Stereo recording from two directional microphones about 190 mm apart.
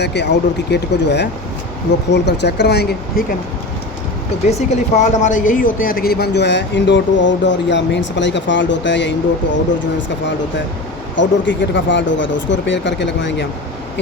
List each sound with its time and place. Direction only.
0.0 s speech: 60° left (ahead or behind)
4.4 s speech: 35° left (ahead or behind); by 13.3 s 70° left (ahead or behind)